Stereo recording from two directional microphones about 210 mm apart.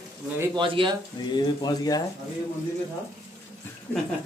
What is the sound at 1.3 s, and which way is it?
Speech, 20° left (ahead or behind).